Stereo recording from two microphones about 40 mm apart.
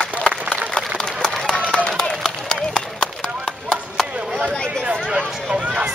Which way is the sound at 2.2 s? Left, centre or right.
Centre.